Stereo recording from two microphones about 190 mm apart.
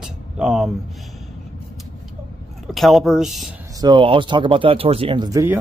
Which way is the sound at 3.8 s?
25° right (ahead or behind).